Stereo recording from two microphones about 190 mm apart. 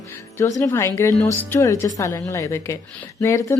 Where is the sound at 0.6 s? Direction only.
15° left (ahead or behind).